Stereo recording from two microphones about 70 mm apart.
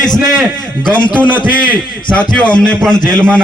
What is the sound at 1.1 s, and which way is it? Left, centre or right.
A man's voice, left.